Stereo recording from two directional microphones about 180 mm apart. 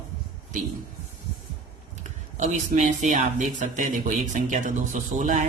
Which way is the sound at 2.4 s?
40° right (ahead or behind).